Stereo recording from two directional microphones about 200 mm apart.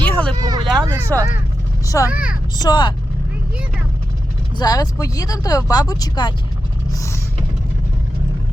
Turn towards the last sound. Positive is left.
turn(degrees=15)  # may be behind; listen again after turning